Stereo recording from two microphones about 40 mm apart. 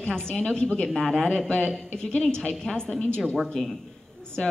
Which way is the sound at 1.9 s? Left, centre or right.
Left.